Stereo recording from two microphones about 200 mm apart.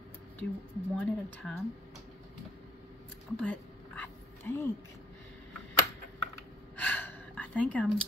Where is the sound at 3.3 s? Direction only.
10° left (ahead or behind).